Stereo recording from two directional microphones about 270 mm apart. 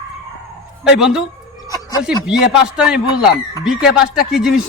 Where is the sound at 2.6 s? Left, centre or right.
Centre.